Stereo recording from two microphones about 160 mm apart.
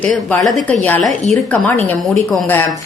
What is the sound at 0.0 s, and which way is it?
Speech, 10° left (ahead or behind).